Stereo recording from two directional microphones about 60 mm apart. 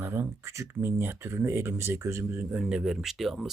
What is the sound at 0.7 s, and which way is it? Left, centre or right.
Speech, right.